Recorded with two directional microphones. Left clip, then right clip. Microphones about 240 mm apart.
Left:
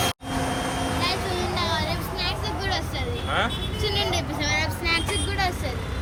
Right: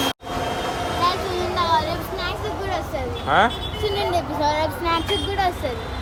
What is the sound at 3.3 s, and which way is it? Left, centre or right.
Speech, right.